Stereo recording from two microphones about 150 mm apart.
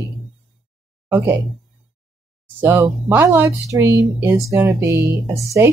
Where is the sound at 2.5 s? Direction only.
15° right (ahead or behind).